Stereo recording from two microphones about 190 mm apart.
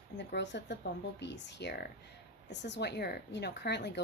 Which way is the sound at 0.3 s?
65° left (ahead or behind).